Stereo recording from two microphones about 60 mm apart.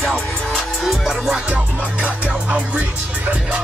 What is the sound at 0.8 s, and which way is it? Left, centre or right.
Music, centre.